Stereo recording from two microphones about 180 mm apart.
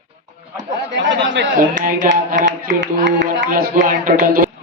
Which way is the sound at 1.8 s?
45° right (ahead or behind).